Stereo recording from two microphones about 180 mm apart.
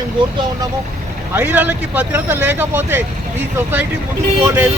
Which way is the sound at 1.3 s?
10° right (ahead or behind).